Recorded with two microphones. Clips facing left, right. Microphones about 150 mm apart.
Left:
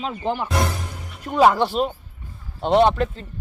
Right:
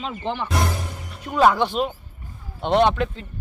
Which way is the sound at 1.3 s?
10° left (ahead or behind).